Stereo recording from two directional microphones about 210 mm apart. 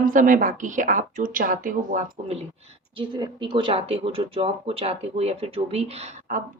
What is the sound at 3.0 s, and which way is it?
Speech, 20° right (ahead or behind).